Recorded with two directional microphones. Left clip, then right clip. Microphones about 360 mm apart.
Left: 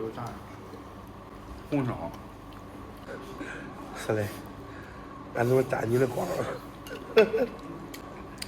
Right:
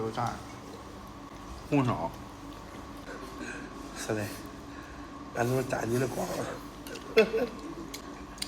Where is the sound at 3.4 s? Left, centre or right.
Centre.